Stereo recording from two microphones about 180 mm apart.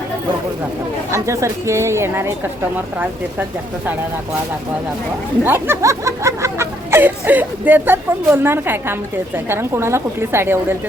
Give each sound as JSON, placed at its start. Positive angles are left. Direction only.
{"t": 1.1, "sound": "speech", "side_deg": -15}
{"t": 5.4, "sound": "speech", "side_deg": -10}